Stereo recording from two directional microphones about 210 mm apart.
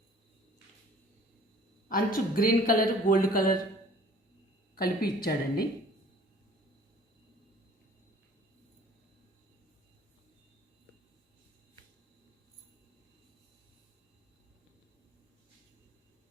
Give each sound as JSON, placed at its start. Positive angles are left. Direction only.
{"t": 1.9, "sound": "a man's voice", "side_deg": 40}
{"t": 4.7, "sound": "a woman's voice", "side_deg": 45}